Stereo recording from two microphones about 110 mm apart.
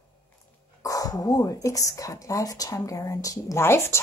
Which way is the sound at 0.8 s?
35° left (ahead or behind).